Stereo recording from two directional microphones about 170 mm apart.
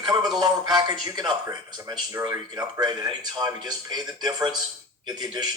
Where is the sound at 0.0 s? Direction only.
25° right (ahead or behind).